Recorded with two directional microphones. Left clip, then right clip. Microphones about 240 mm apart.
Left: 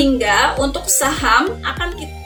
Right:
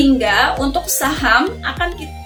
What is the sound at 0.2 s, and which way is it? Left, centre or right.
Speech, centre.